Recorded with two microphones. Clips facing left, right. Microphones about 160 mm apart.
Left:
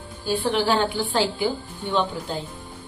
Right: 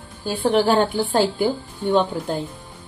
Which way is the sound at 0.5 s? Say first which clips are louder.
Right 6 dB; 50° right (ahead or behind).